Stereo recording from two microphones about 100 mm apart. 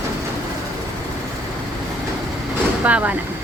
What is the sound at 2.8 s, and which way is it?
Speech, 15° right (ahead or behind).